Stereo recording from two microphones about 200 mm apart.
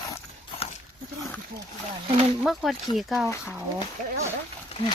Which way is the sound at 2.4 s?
Centre (ahead or behind).